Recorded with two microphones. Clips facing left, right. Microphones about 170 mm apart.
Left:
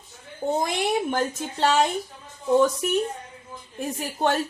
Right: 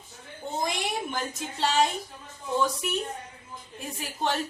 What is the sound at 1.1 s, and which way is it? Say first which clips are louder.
Speech: left 7 dB; 60° left (ahead or behind).